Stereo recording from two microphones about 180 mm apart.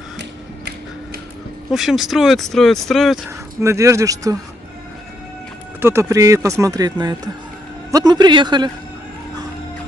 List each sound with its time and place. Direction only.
1.7 s speech: centre (ahead or behind)
3.3 s speech: 15° right (ahead or behind)
5.8 s a man's voice: 15° right (ahead or behind)